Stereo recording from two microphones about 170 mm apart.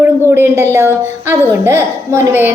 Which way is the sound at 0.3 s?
15° right (ahead or behind).